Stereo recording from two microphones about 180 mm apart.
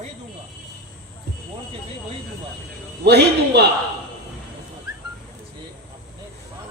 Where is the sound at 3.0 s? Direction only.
65° right (ahead or behind).